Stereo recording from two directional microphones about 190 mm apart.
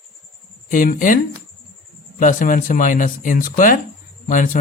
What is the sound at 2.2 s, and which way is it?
A man's voice, 45° left (ahead or behind).